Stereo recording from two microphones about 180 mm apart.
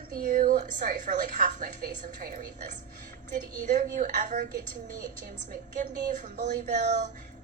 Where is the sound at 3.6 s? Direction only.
45° right (ahead or behind).